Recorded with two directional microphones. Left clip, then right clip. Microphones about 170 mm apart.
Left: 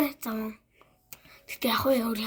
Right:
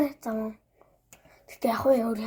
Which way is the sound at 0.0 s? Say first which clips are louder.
Right 2 dB; 50° left (ahead or behind).